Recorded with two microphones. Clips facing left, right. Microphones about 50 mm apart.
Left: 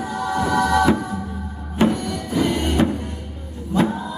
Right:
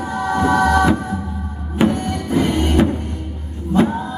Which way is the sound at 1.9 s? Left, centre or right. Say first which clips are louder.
Right 4 dB; right.